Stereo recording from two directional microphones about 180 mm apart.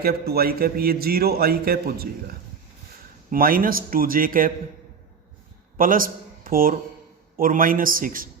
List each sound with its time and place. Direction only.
0.0 s a man's voice: 60° right (ahead or behind)
3.2 s a man's voice: 55° right (ahead or behind)
5.7 s a man's voice: 50° right (ahead or behind)